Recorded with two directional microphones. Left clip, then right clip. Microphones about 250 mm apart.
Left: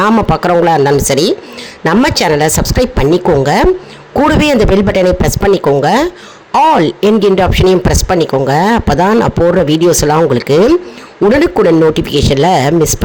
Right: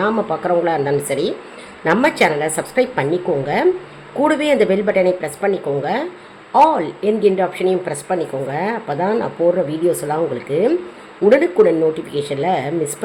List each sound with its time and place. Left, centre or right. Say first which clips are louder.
0.0 s speech: left 8 dB; left
11.9 s speech: left 11 dB; left